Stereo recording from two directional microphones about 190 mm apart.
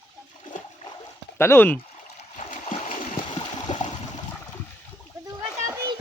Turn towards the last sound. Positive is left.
turn(degrees=-20)  # may be behind; listen again after turning